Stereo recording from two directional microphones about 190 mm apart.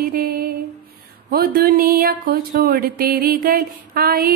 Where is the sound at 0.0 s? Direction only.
50° right (ahead or behind).